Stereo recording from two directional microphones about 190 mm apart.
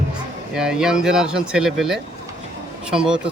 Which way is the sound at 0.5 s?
5° right (ahead or behind).